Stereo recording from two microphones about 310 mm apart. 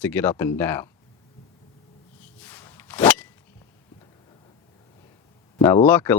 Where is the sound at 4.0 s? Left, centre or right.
Centre.